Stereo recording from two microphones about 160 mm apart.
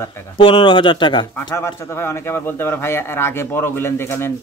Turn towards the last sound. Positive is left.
turn(degrees=15)  # may be behind; listen again after turning